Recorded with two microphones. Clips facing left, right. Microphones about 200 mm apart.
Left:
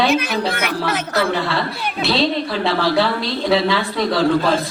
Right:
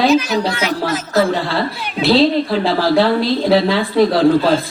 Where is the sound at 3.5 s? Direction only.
35° right (ahead or behind).